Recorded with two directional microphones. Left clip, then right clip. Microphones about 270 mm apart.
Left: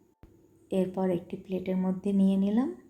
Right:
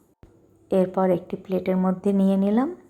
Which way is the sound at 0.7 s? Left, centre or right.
Centre.